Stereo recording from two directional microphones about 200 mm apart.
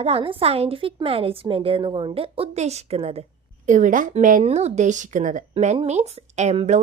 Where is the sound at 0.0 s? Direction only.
30° right (ahead or behind).